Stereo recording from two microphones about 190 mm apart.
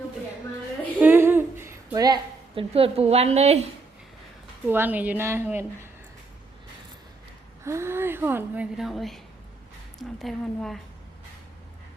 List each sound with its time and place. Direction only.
0.9 s a sound: 10° right (ahead or behind)
2.6 s a woman's voice: 30° right (ahead or behind)
4.6 s speech: 10° right (ahead or behind)
7.6 s a woman's voice: 15° right (ahead or behind); by 10.8 s centre (ahead or behind)